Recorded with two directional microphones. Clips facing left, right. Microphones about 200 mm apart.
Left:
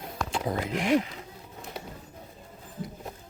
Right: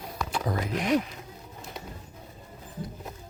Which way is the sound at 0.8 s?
5° left (ahead or behind).